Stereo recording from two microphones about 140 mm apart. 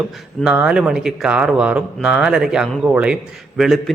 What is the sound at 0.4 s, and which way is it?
A man's voice, 5° right (ahead or behind).